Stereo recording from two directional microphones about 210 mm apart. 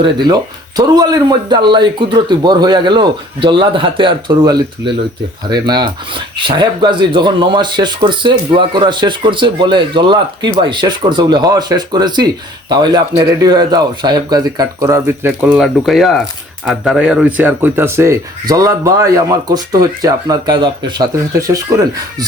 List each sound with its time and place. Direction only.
0.0 s speech: 20° right (ahead or behind)